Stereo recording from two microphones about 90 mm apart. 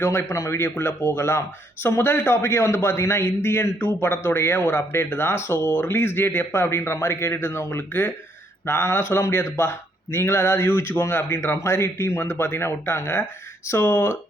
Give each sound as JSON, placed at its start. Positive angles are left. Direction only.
{"t": 0.0, "sound": "speech", "side_deg": 30}